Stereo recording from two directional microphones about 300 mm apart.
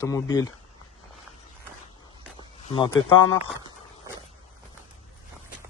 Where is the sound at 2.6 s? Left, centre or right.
Centre.